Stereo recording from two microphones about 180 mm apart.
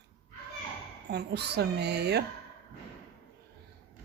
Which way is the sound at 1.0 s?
70° right (ahead or behind).